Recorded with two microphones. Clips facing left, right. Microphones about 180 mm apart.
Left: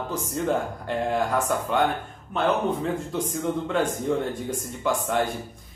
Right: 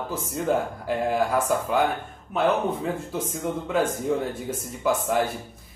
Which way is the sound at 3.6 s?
5° right (ahead or behind).